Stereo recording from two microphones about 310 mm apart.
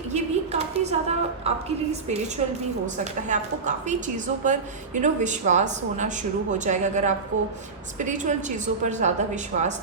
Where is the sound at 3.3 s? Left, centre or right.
Right.